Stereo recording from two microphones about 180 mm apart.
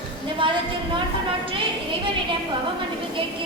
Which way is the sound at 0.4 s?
25° right (ahead or behind).